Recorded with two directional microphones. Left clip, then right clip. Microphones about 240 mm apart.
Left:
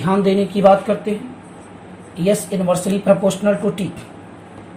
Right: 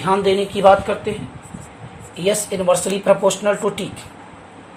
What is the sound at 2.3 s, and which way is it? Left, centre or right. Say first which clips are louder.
Speech: right 1 dB; right.